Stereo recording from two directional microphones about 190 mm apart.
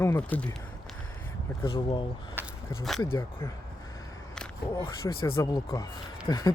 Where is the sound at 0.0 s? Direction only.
10° left (ahead or behind).